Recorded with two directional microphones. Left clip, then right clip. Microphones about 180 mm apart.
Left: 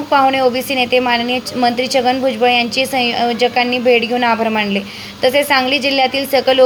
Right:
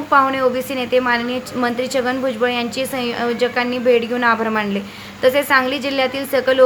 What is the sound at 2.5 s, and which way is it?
Speech, 45° right (ahead or behind).